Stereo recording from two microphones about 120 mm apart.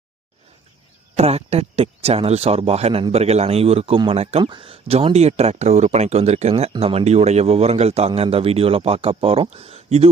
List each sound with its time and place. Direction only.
1.1 s speech: 60° right (ahead or behind)
4.4 s speech: 45° right (ahead or behind)